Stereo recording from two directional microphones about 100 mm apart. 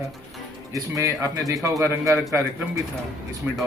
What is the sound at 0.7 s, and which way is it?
Speech, 35° right (ahead or behind).